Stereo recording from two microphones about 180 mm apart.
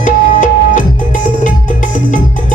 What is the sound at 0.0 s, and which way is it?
Music, 45° left (ahead or behind).